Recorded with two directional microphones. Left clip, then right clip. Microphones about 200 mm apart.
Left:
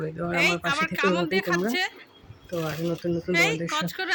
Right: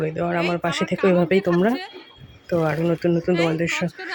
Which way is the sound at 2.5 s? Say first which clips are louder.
Right 8 dB; 20° right (ahead or behind).